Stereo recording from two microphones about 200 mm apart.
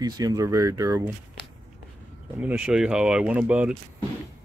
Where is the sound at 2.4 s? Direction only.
5° right (ahead or behind).